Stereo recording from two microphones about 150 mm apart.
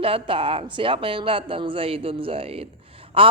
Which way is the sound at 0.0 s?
40° right (ahead or behind).